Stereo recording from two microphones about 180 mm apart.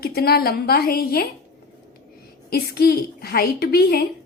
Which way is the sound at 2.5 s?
55° left (ahead or behind).